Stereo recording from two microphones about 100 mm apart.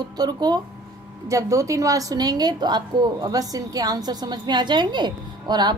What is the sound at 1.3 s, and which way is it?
A woman's voice, 30° right (ahead or behind).